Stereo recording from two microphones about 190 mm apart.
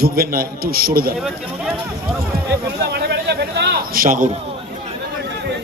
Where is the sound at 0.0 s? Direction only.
50° right (ahead or behind).